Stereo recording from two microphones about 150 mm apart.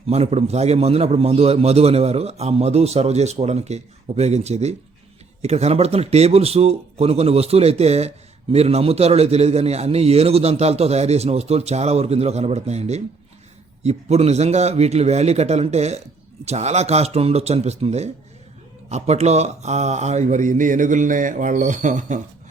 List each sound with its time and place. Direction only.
0.1 s a man's voice: 45° right (ahead or behind)